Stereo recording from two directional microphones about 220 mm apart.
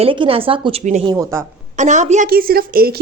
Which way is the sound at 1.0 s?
15° right (ahead or behind).